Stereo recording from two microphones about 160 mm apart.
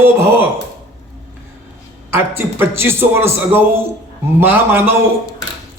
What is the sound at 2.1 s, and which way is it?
A man's voice, 15° right (ahead or behind).